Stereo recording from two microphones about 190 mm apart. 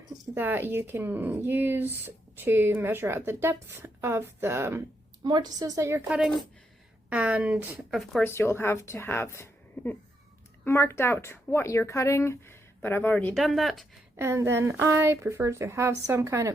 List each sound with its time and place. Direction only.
0.1 s a woman's voice: 10° right (ahead or behind)
8.2 s speech: 10° left (ahead or behind)
14.2 s speech: 15° right (ahead or behind)